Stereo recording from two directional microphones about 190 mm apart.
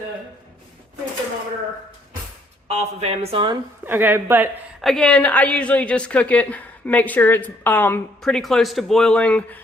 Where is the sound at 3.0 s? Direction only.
35° right (ahead or behind).